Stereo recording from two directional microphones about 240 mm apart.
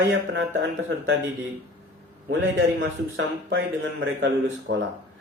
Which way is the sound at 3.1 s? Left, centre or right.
Right.